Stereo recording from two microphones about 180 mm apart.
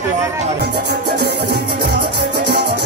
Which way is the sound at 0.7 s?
70° right (ahead or behind).